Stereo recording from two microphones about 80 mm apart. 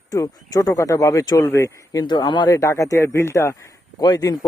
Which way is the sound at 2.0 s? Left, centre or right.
Left.